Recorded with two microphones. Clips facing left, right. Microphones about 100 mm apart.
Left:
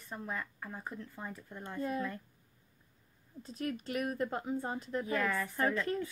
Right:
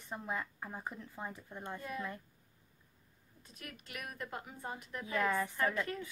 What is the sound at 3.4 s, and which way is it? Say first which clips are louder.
A woman's voice: left 14 dB; 30° left (ahead or behind).